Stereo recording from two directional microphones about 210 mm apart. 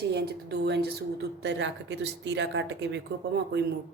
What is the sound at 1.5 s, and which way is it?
A woman's voice, 60° right (ahead or behind).